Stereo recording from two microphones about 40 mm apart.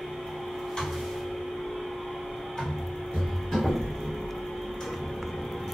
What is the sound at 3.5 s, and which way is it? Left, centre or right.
Music, centre.